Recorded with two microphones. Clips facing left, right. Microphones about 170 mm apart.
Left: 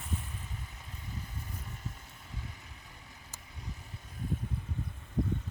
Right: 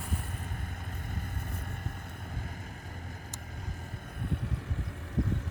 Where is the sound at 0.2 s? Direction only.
55° right (ahead or behind).